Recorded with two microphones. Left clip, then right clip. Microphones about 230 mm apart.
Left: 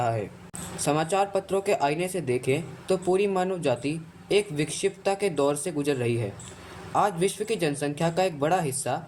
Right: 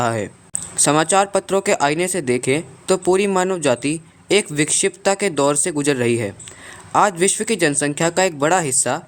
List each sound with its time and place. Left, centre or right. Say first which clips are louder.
0.0 s speech: right 7 dB; right